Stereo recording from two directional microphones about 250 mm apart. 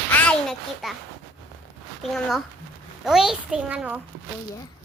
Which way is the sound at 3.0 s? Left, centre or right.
Centre.